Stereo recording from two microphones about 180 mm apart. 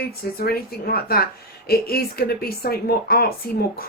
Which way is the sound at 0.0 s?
55° left (ahead or behind).